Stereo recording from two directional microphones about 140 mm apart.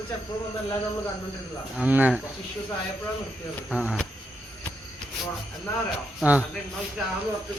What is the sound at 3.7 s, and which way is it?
Speech, 5° right (ahead or behind).